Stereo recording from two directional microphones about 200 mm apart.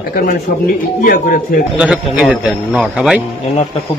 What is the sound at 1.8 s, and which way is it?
A man's voice, 5° right (ahead or behind).